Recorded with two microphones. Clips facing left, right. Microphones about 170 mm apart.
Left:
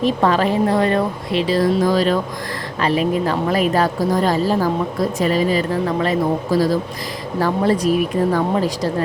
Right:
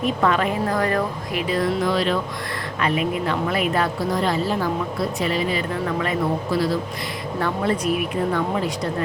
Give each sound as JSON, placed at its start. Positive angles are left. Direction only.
{"t": 0.0, "sound": "speech", "side_deg": 30}